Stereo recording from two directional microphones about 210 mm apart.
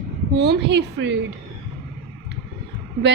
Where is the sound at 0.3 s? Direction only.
55° right (ahead or behind).